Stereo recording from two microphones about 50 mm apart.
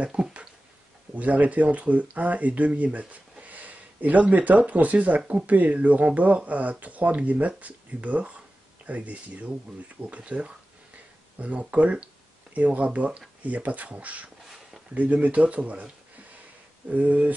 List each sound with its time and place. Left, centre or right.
0.0 s speech: right
14.4 s a sound: centre
15.0 s speech: right
16.9 s speech: right